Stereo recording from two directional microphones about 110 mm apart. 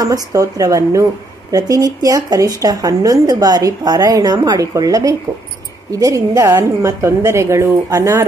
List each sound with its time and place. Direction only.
0.0 s a woman's voice: 30° right (ahead or behind)